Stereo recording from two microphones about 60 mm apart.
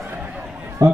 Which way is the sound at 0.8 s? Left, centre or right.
Right.